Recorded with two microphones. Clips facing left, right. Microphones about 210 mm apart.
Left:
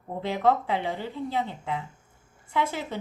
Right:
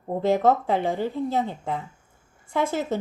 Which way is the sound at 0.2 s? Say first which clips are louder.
Right 4 dB; 45° right (ahead or behind).